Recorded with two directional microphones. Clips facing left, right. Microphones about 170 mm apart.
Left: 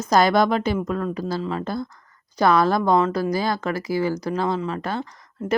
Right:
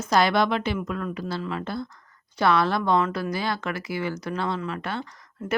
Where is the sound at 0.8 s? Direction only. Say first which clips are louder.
Left 5 dB; 30° left (ahead or behind).